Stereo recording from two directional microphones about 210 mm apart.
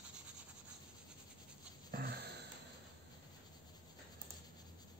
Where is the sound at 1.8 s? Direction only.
45° right (ahead or behind).